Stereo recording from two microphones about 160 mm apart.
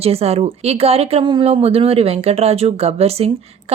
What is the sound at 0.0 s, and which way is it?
Speech, 40° right (ahead or behind).